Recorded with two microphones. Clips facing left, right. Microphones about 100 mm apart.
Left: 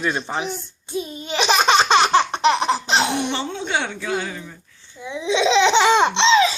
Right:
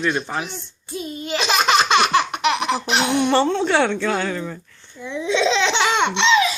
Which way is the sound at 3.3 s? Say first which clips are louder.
Right 7 dB; 65° right (ahead or behind).